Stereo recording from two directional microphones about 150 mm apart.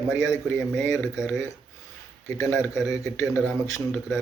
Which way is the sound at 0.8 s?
20° left (ahead or behind).